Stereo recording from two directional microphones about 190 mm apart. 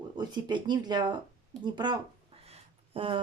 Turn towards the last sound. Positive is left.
turn(degrees=-30)  # may be behind; listen again after turning